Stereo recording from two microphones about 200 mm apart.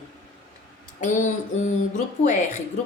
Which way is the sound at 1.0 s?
40° left (ahead or behind).